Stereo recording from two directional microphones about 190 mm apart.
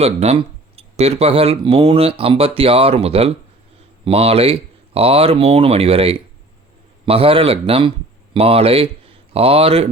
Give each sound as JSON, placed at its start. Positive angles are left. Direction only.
{"t": 0.0, "sound": "speech", "side_deg": -30}